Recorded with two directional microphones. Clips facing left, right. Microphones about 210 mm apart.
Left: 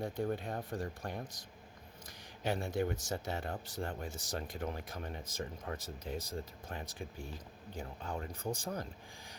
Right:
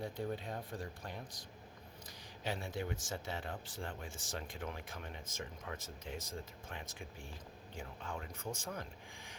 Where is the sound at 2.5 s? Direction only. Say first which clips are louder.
Left 6 dB; 45° left (ahead or behind).